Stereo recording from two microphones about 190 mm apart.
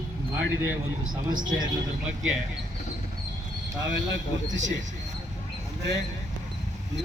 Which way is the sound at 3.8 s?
75° right (ahead or behind).